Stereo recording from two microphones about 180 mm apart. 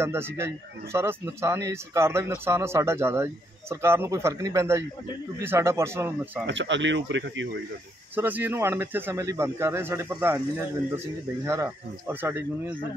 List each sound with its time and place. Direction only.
0.0 s speech: 15° right (ahead or behind)
6.4 s speech: 90° right
8.2 s speech: 10° right (ahead or behind)
11.4 s speech: 15° right (ahead or behind)